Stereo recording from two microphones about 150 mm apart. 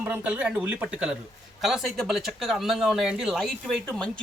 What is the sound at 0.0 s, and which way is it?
Speech, 10° right (ahead or behind).